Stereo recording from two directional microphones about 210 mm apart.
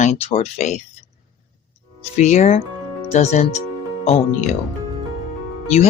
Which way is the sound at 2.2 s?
35° left (ahead or behind).